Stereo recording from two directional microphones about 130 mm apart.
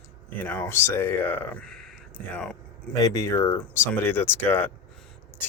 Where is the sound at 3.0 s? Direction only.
25° left (ahead or behind).